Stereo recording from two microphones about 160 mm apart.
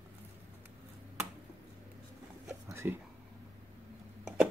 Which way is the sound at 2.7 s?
15° right (ahead or behind).